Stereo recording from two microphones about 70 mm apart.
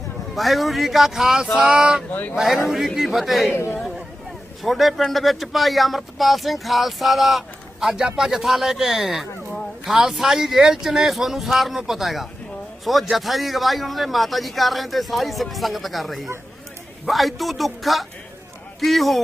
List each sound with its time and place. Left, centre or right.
0.3 s speech: centre
1.5 s a sound: centre
2.3 s speech: centre
3.5 s a man's voice: left
4.6 s speech: centre